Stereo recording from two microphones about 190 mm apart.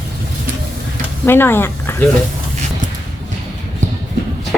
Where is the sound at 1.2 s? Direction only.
10° left (ahead or behind).